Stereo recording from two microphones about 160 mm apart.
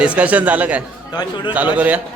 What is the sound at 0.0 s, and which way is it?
Speech, 10° right (ahead or behind).